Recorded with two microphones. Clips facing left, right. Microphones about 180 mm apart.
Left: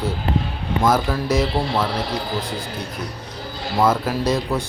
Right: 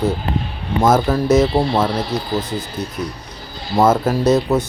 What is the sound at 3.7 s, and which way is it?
Speech, 45° right (ahead or behind).